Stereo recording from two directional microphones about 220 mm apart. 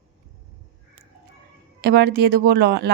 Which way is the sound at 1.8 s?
50° right (ahead or behind).